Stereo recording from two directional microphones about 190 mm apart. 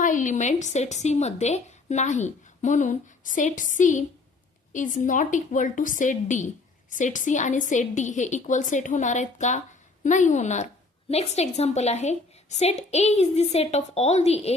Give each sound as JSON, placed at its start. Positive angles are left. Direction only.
{"t": 0.0, "sound": "a woman's voice", "side_deg": 40}